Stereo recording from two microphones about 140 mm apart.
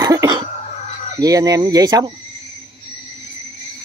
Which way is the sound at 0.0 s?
25° right (ahead or behind).